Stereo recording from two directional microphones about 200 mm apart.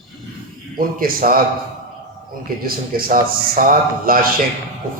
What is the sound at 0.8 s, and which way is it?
Speech, 45° right (ahead or behind).